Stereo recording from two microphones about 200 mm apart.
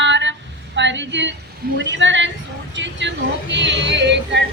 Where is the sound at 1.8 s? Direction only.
65° right (ahead or behind).